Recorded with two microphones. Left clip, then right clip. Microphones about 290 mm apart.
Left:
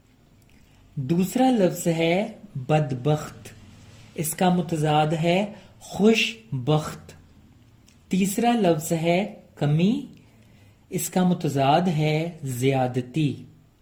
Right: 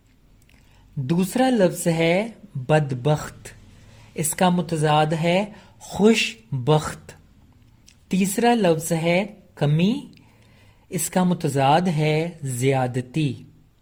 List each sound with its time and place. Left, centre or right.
1.0 s speech: right
8.0 s a sound: right
8.4 s speech: right
11.1 s speech: right